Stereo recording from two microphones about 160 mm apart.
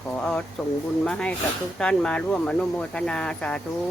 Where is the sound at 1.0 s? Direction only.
5° left (ahead or behind).